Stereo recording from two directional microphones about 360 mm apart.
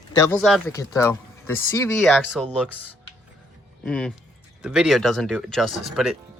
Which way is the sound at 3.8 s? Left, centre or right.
Centre.